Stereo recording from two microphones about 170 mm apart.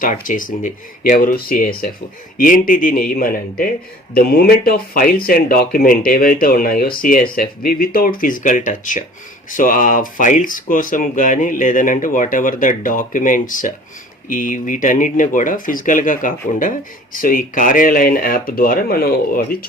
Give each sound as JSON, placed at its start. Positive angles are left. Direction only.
{"t": 0.0, "sound": "speech", "side_deg": 50}